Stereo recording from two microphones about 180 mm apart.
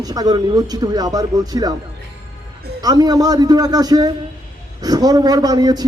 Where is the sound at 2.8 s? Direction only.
20° right (ahead or behind).